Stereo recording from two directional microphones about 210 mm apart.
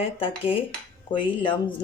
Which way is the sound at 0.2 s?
25° left (ahead or behind).